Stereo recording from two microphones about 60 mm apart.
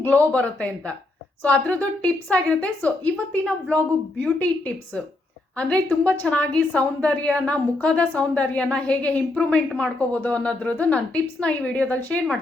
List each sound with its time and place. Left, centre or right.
0.3 s a woman's voice: centre